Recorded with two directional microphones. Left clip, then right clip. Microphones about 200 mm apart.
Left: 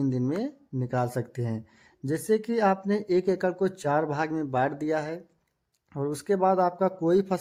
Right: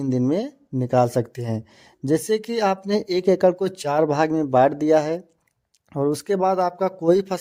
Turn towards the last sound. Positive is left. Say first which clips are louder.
# right 5 dB
turn(degrees=-35)  # may be behind; listen again after turning